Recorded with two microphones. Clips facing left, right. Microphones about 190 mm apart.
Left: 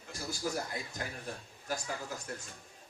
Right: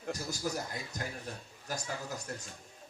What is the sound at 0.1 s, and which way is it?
A man's voice, 40° right (ahead or behind).